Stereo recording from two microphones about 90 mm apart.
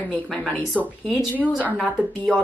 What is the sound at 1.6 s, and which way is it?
Speech, 15° left (ahead or behind).